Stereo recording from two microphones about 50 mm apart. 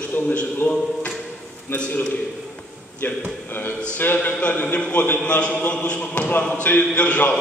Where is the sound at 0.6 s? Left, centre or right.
Left.